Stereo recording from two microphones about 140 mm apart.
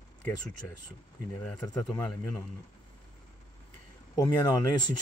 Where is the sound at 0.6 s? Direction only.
15° left (ahead or behind).